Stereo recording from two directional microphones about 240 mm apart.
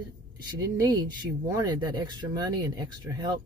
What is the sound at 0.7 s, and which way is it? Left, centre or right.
Speech, centre.